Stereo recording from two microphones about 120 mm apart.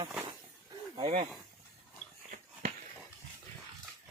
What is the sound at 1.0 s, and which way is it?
Speech, 60° right (ahead or behind).